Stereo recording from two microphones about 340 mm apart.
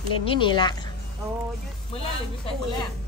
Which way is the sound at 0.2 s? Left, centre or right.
Centre.